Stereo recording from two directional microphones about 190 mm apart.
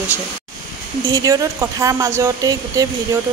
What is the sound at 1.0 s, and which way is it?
Speech, 15° right (ahead or behind).